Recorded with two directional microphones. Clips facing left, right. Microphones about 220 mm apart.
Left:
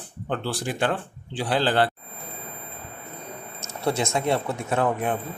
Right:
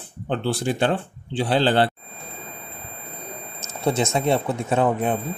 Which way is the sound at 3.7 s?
20° right (ahead or behind).